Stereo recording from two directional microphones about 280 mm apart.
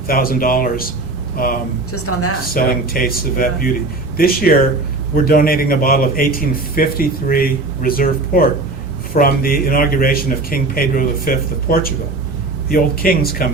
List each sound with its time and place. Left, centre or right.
0.1 s a man's voice: left
1.9 s a woman's voice: left
2.5 s a man's voice: left